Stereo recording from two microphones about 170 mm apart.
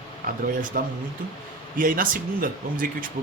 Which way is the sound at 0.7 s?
55° right (ahead or behind).